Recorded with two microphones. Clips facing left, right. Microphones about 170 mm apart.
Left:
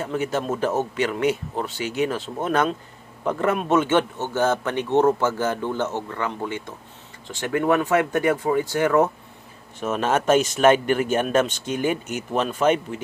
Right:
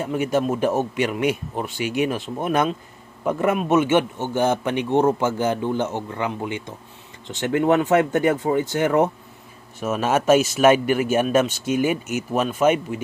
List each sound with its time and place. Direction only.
0.0 s speech: 10° right (ahead or behind)
9.8 s speech: 5° right (ahead or behind)